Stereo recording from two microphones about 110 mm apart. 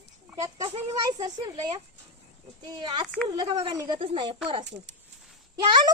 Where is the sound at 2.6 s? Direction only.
45° right (ahead or behind).